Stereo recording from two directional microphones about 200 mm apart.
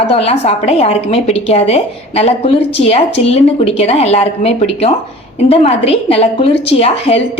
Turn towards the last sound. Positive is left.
turn(degrees=30)  # may be behind; listen again after turning